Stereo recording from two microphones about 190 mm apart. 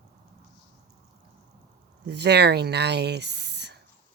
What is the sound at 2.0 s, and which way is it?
Speech, 60° right (ahead or behind).